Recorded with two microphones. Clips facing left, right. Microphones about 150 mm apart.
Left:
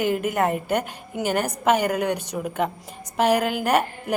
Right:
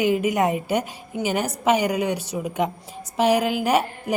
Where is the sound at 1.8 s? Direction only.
55° left (ahead or behind).